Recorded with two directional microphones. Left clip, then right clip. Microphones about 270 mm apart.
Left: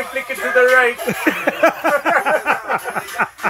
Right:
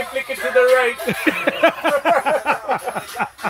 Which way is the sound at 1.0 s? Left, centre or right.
Centre.